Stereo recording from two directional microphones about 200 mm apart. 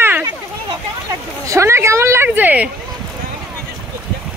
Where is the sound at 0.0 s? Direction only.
10° right (ahead or behind).